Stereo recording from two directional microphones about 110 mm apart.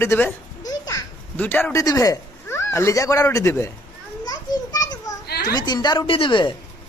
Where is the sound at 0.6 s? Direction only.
35° left (ahead or behind).